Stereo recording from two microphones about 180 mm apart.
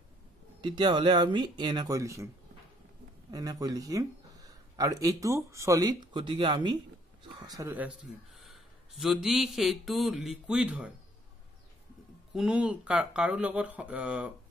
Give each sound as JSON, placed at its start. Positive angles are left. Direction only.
{"t": 0.6, "sound": "speech", "side_deg": -25}
{"t": 3.3, "sound": "speech", "side_deg": -20}
{"t": 7.7, "sound": "a man's voice", "side_deg": -5}
{"t": 12.4, "sound": "speech", "side_deg": -5}